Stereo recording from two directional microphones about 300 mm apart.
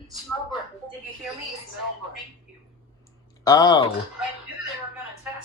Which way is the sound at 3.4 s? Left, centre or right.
Centre.